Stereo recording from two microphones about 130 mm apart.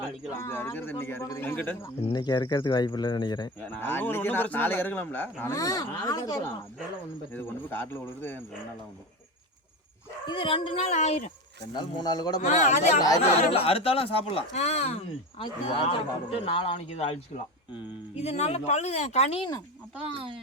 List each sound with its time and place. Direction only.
0.3 s speech: 20° left (ahead or behind)
2.1 s speech: 30° left (ahead or behind)
3.7 s speech: 15° left (ahead or behind)
5.5 s speech: 30° left (ahead or behind)
7.3 s speech: 15° left (ahead or behind)
10.2 s speech: 40° left (ahead or behind)
11.6 s speech: 35° left (ahead or behind)
12.4 s speech: 70° left (ahead or behind)
13.0 s speech: 30° left (ahead or behind)
13.5 s speech: 50° left (ahead or behind)
14.5 s speech: 60° left (ahead or behind)
18.2 s speech: 55° left (ahead or behind)